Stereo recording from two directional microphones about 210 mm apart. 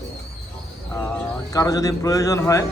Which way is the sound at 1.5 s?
15° left (ahead or behind).